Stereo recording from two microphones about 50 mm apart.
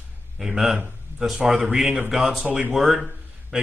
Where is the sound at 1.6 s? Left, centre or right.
Centre.